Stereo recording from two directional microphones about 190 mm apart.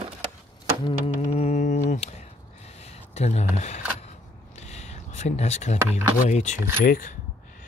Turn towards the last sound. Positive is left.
turn(degrees=45)  # may be behind; listen again after turning